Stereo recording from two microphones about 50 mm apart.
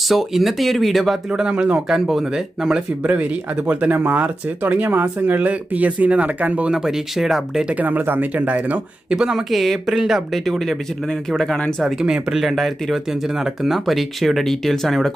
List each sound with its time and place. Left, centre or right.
0.1 s speech: centre
1.3 s speech: centre
1.9 s speech: centre
3.0 s speech: right
6.7 s speech: centre
7.6 s speech: right
9.0 s speech: centre
9.5 s speech: centre
12.0 s speech: centre
12.4 s speech: centre